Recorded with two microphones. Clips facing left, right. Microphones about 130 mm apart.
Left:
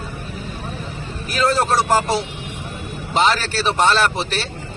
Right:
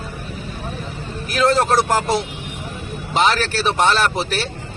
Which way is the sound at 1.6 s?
5° left (ahead or behind).